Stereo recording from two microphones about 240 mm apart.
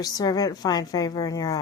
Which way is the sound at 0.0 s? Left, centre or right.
Centre.